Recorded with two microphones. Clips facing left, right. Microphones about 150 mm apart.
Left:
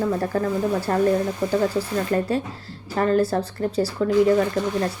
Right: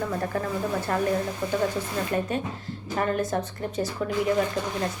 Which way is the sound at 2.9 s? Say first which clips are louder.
Left 6 dB; 35° left (ahead or behind).